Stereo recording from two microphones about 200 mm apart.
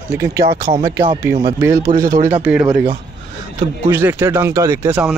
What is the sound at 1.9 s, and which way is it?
Speech, 45° right (ahead or behind).